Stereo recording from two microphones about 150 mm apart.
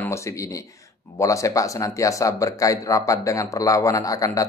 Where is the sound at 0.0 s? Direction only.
20° left (ahead or behind).